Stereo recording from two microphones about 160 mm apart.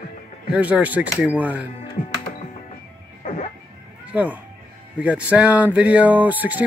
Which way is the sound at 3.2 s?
55° left (ahead or behind).